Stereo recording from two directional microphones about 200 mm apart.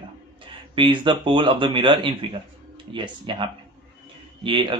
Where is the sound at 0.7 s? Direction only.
25° right (ahead or behind).